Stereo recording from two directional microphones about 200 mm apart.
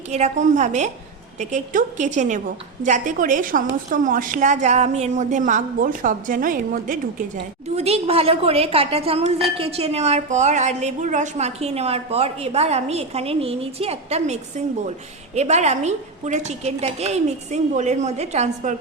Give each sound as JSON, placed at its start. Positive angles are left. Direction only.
{"t": 0.1, "sound": "speech", "side_deg": -35}
{"t": 7.8, "sound": "speech", "side_deg": -30}
{"t": 15.4, "sound": "speech", "side_deg": -35}